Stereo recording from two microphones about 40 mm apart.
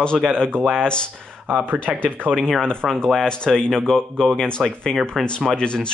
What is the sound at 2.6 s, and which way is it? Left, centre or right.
Speech, centre.